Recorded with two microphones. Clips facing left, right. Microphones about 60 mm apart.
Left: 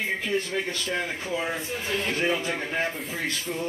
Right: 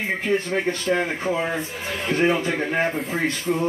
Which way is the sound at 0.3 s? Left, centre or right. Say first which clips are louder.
Right 5 dB; right.